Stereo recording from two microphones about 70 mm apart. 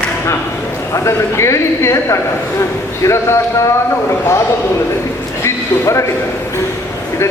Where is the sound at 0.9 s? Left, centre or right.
Left.